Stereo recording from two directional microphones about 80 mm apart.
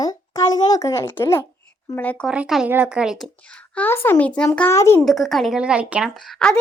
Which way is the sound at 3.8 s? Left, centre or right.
Left.